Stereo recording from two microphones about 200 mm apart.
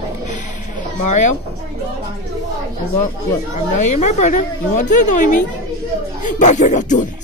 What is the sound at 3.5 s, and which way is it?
Speech, 35° left (ahead or behind).